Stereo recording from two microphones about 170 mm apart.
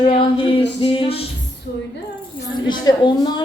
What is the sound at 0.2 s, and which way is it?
Speech, 30° left (ahead or behind).